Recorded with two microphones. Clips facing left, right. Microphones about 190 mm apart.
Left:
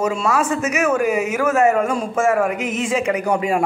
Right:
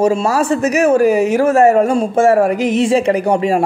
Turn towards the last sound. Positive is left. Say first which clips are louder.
# right 5 dB
turn(degrees=-30)  # may be behind; listen again after turning